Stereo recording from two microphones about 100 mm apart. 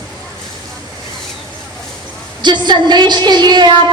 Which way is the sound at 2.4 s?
50° right (ahead or behind).